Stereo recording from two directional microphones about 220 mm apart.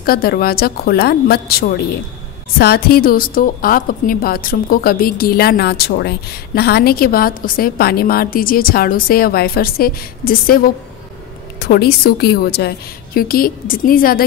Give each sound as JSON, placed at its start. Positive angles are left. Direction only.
{"t": 0.0, "sound": "a woman's voice", "side_deg": 45}